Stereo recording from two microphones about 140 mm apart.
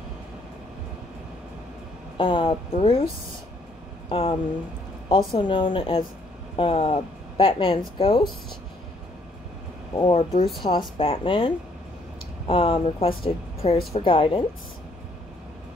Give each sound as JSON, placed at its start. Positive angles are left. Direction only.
{"t": 2.1, "sound": "speech", "side_deg": 40}
{"t": 4.1, "sound": "speech", "side_deg": 40}
{"t": 10.0, "sound": "speech", "side_deg": 40}